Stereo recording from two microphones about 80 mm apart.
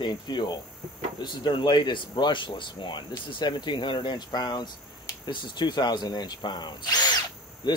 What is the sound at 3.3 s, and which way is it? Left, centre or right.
Speech, left.